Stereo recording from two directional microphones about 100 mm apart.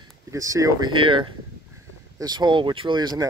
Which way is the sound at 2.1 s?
45° right (ahead or behind).